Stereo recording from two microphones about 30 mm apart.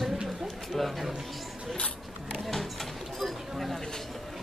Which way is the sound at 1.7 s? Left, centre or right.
Left.